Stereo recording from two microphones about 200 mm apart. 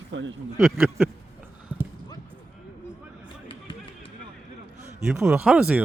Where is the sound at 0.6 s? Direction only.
Centre (ahead or behind).